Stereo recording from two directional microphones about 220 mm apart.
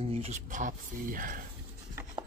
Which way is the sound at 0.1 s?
30° right (ahead or behind).